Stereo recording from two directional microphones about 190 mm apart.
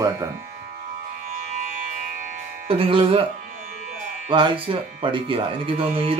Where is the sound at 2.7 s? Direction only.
30° right (ahead or behind).